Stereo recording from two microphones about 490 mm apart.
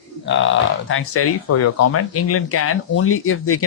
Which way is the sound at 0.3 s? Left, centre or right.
Left.